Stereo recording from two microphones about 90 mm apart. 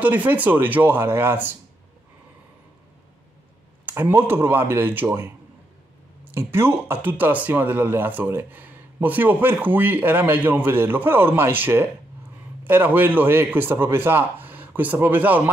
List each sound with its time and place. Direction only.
0.0 s speech: 15° right (ahead or behind)
3.9 s speech: 25° right (ahead or behind)
6.3 s speech: 25° right (ahead or behind)